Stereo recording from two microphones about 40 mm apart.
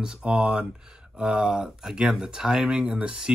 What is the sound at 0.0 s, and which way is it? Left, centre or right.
Speech, centre.